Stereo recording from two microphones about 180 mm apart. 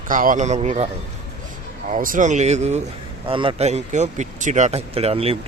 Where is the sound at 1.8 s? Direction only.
45° right (ahead or behind).